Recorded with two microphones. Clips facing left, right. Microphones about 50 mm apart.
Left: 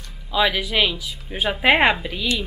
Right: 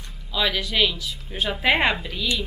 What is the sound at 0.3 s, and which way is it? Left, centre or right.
A woman's voice, centre.